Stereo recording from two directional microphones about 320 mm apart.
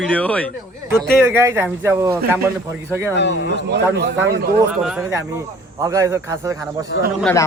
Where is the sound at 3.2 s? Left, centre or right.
Left.